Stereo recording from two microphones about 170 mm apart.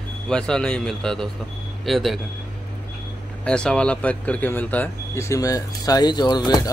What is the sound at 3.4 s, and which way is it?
Speech, 5° left (ahead or behind).